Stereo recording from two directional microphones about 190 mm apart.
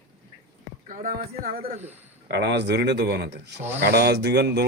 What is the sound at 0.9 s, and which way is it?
Speech, 50° right (ahead or behind).